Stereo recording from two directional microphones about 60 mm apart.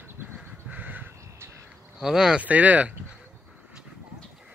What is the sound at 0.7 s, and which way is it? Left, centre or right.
Crow, right.